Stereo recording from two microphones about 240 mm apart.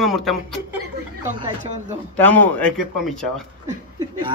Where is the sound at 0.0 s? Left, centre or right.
Centre.